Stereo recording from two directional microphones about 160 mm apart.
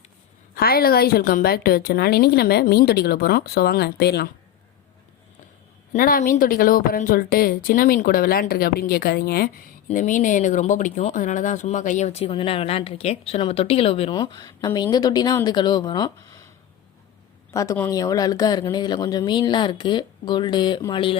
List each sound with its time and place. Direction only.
0.5 s a woman's voice: 70° left (ahead or behind); by 4.3 s 90° left
5.9 s speech: 60° left (ahead or behind); by 9.5 s 75° left (ahead or behind)
9.9 s speech: 50° left (ahead or behind); by 16.4 s 25° left (ahead or behind)
17.5 s speech: 20° left (ahead or behind)